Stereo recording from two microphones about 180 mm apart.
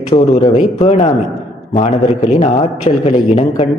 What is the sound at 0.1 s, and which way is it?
A man's voice, 35° left (ahead or behind).